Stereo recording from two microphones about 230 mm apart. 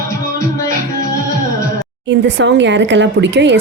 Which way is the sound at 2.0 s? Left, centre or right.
Right.